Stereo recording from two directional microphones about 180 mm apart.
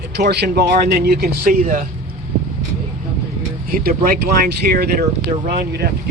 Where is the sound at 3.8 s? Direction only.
55° right (ahead or behind).